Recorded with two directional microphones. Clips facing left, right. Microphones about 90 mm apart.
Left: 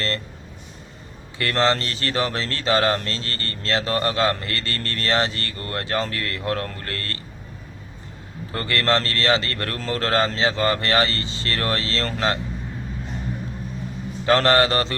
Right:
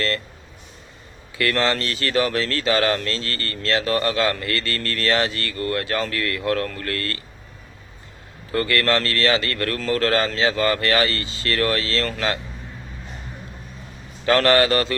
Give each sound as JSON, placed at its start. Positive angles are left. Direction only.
{"t": 1.4, "sound": "speech", "side_deg": 30}
{"t": 8.5, "sound": "speech", "side_deg": 30}
{"t": 14.3, "sound": "a man's voice", "side_deg": 25}